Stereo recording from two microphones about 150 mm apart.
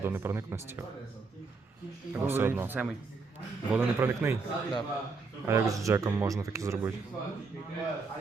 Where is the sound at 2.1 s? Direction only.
15° right (ahead or behind).